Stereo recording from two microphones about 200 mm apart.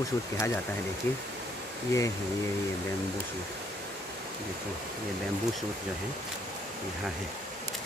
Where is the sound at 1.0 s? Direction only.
10° left (ahead or behind).